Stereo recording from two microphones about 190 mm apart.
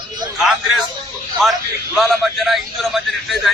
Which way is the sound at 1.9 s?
Centre (ahead or behind).